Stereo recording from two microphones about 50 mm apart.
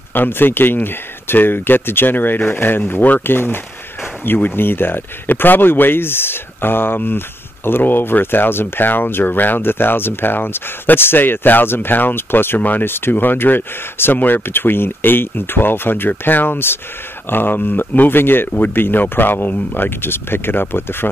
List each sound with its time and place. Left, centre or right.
0.1 s speech: left
12.8 s speech: left